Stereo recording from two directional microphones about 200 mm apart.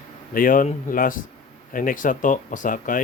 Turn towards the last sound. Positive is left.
turn(degrees=40)  # may be behind; listen again after turning